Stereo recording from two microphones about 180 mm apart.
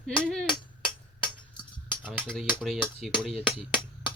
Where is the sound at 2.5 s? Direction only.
Centre (ahead or behind).